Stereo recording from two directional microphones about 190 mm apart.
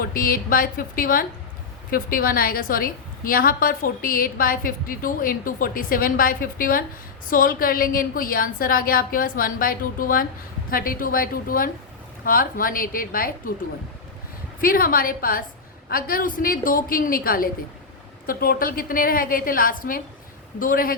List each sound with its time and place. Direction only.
0.0 s a woman's voice: 50° left (ahead or behind)
14.6 s a woman's voice: 50° left (ahead or behind)